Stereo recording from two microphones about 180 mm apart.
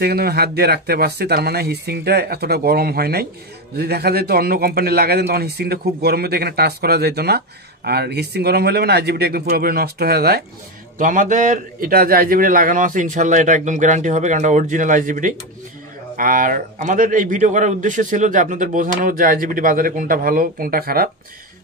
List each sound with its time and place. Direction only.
0.0 s a man's voice: 60° right (ahead or behind)
11.0 s a man's voice: 45° right (ahead or behind)